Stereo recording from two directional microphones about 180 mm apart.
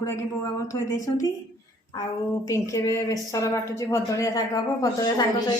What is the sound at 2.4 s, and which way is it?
A woman's voice, 15° left (ahead or behind).